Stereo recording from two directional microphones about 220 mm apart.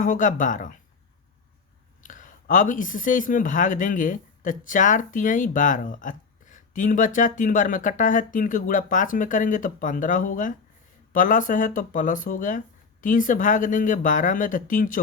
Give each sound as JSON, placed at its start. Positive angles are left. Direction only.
{"t": 0.0, "sound": "speech", "side_deg": 35}
{"t": 2.0, "sound": "speech", "side_deg": 35}